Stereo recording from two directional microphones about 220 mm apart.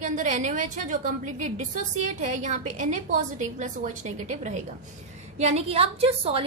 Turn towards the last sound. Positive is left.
turn(degrees=-25)  # may be behind; listen again after turning